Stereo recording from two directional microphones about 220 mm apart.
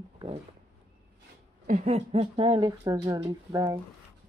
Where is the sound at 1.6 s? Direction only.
30° right (ahead or behind).